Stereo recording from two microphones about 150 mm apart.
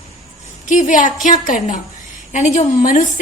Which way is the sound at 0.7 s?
60° left (ahead or behind).